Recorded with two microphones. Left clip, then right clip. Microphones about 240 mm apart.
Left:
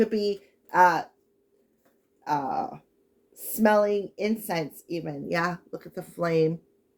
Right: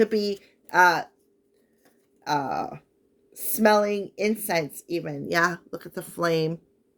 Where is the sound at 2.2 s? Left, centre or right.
Right.